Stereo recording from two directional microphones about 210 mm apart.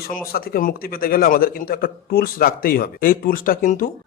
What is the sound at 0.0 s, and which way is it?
A man's voice, 45° left (ahead or behind).